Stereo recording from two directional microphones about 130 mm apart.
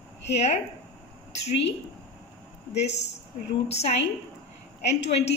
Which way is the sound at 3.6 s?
55° left (ahead or behind).